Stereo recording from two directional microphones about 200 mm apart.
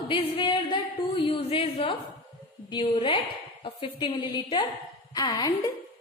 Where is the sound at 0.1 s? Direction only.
25° left (ahead or behind).